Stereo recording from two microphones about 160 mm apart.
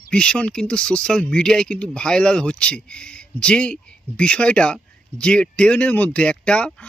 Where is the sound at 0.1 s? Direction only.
5° left (ahead or behind).